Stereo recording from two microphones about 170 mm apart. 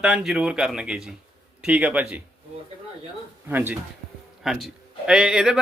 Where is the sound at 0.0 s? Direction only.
5° right (ahead or behind).